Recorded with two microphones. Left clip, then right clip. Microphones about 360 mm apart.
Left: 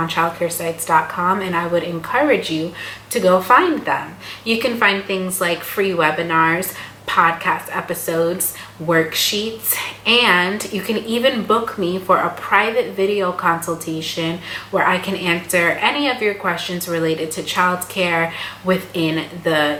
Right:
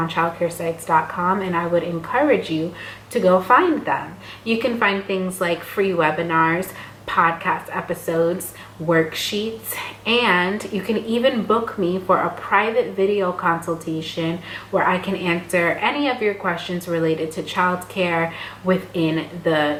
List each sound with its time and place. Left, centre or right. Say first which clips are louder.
0.0 s a woman's voice: left 2 dB; centre
11.4 s speech: left 2 dB; centre
11.8 s a woman's voice: left 2 dB; centre